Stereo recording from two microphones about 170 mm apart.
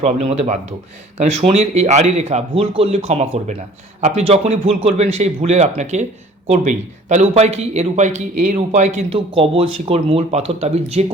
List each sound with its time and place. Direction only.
0.0 s speech: 40° right (ahead or behind)